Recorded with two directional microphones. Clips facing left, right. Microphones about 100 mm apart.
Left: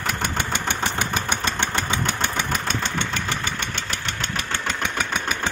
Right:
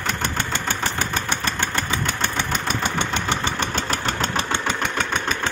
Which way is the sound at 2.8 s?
20° right (ahead or behind).